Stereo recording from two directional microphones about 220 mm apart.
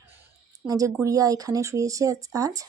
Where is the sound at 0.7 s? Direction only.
15° right (ahead or behind).